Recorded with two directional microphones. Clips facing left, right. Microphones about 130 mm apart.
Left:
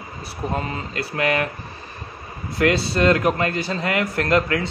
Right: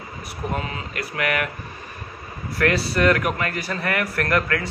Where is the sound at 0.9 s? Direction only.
30° left (ahead or behind).